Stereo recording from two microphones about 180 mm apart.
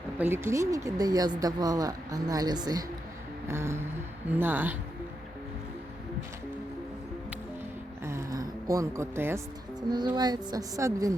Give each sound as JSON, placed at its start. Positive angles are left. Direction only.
{"t": 0.2, "sound": "speech", "side_deg": -15}
{"t": 3.4, "sound": "music", "side_deg": -15}
{"t": 8.0, "sound": "a sound", "side_deg": -15}
{"t": 10.2, "sound": "speech", "side_deg": -20}